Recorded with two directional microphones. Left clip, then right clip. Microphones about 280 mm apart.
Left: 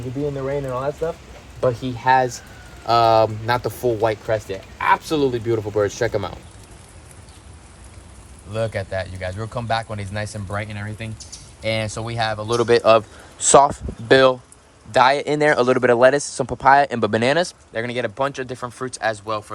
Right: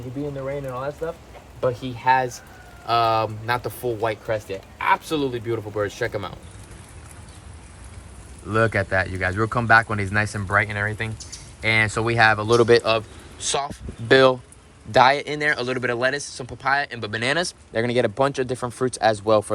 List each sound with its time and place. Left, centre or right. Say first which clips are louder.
0.3 s speech: left 3 dB; centre
8.5 s speech: right 4 dB; centre
12.5 s speech: right 1 dB; centre
12.8 s speech: left 7 dB; left
14.1 s speech: left 2 dB; centre